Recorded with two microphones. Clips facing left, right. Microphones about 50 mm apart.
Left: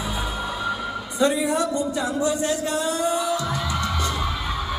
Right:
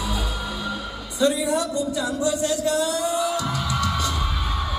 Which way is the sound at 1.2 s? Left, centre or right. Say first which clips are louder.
Even; left.